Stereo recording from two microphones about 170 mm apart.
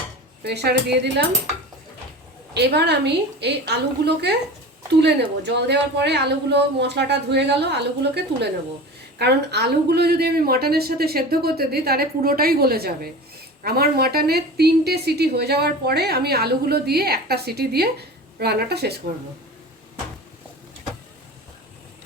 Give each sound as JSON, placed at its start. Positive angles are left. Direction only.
{"t": 0.4, "sound": "a woman's voice", "side_deg": -75}
{"t": 2.5, "sound": "a woman's voice", "side_deg": -80}